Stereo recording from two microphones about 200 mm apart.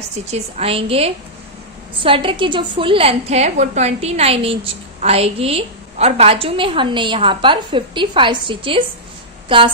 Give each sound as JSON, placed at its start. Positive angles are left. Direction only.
{"t": 0.3, "sound": "a woman's voice", "side_deg": -30}